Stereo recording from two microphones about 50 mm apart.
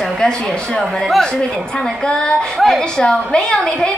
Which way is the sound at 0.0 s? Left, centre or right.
Centre.